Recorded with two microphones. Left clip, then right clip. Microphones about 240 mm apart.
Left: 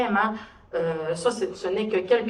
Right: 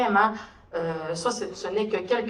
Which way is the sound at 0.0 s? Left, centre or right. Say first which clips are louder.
Right 2 dB; right.